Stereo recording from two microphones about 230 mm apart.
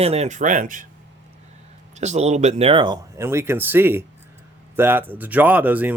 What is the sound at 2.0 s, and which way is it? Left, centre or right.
Speech, right.